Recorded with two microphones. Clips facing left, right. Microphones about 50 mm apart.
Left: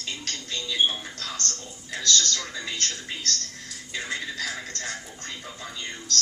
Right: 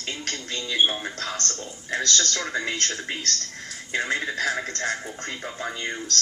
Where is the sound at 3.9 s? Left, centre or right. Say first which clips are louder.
Right 6 dB; right.